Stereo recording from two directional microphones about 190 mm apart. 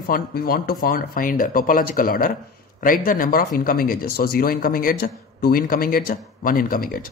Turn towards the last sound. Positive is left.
turn(degrees=50)  # may be behind; listen again after turning